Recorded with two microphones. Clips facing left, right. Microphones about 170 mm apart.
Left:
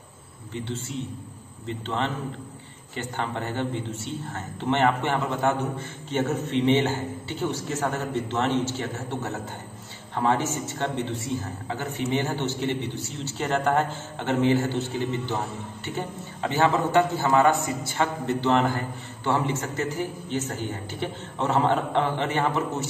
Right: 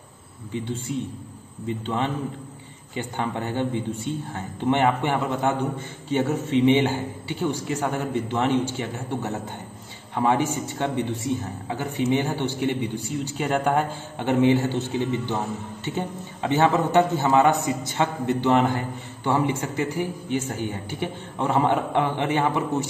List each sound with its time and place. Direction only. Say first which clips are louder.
0.5 s a man's voice: right 4 dB; 15° right (ahead or behind)
16.4 s a man's voice: right 2 dB; 20° right (ahead or behind)